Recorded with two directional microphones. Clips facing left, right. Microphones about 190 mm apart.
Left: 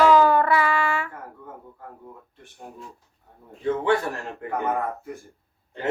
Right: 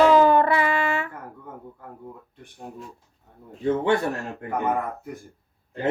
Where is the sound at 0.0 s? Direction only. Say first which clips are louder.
Right 1 dB; 20° right (ahead or behind).